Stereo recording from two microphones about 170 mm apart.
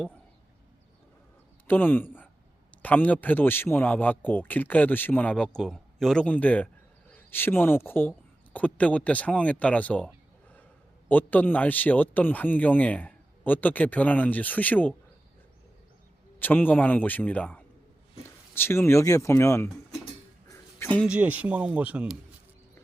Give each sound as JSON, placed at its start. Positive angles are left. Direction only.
{"t": 1.6, "sound": "a man's voice", "side_deg": 10}
{"t": 11.1, "sound": "speech", "side_deg": 10}
{"t": 16.4, "sound": "speech", "side_deg": 10}
{"t": 20.5, "sound": "a sound", "side_deg": 15}
{"t": 21.1, "sound": "speech", "side_deg": -10}